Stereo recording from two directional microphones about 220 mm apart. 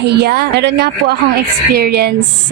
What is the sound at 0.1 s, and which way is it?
A woman's voice, 45° right (ahead or behind).